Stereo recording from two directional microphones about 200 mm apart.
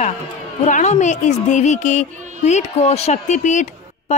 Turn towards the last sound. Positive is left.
turn(degrees=40)  # may be behind; listen again after turning